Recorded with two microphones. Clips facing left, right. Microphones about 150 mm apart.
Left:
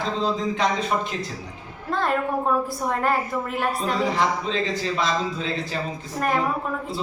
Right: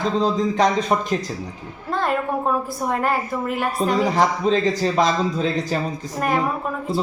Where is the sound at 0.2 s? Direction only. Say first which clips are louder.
Right 5 dB; 40° right (ahead or behind).